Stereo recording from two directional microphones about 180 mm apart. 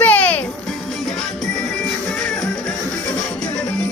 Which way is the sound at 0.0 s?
10° left (ahead or behind).